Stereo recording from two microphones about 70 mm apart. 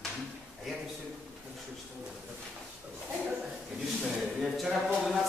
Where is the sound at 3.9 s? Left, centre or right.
Centre.